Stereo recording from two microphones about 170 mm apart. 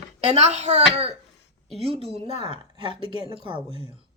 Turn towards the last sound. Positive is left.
turn(degrees=-25)  # may be behind; listen again after turning